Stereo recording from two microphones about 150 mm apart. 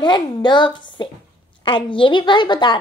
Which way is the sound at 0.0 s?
30° left (ahead or behind).